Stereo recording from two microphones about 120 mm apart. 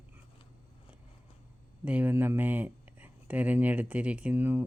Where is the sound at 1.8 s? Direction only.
15° right (ahead or behind).